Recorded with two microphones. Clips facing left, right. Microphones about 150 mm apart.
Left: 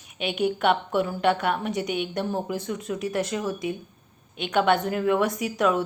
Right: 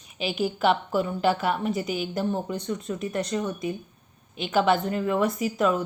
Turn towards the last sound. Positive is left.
turn(degrees=0)  # may be behind; listen again after turning